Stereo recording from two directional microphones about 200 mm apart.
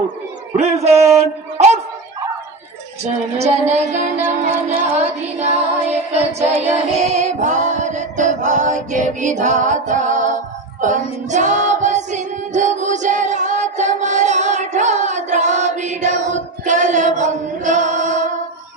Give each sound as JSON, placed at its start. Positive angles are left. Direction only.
{"t": 0.5, "sound": "a man's voice", "side_deg": -35}
{"t": 3.3, "sound": "music", "side_deg": -35}